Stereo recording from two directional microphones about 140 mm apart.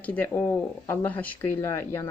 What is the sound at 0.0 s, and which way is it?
Speech, 10° left (ahead or behind).